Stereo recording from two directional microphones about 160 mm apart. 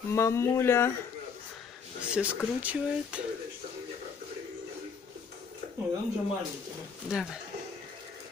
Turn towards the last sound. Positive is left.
turn(degrees=-5)  # may be behind; listen again after turning